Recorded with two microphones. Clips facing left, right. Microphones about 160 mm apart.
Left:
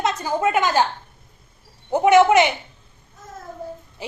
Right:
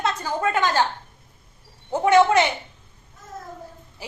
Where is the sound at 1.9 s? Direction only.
15° left (ahead or behind).